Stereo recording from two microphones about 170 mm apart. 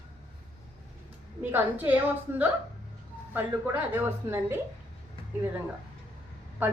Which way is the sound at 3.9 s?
15° right (ahead or behind).